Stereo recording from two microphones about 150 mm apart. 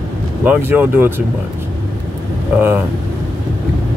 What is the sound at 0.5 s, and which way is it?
Speech, 15° right (ahead or behind).